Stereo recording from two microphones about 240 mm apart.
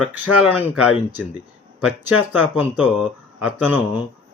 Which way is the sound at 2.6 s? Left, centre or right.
Centre.